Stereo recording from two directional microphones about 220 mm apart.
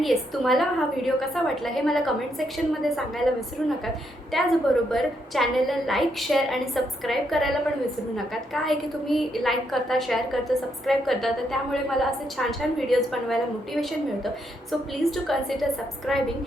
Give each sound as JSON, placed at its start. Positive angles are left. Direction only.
{"t": 0.0, "sound": "a woman's voice", "side_deg": 0}